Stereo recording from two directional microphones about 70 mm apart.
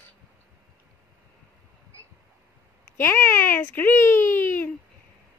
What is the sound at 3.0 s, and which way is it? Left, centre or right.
A child's voice, left.